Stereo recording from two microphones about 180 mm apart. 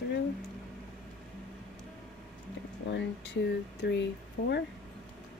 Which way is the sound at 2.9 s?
80° left.